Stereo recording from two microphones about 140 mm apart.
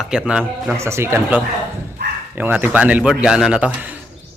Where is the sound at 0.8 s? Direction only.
20° right (ahead or behind).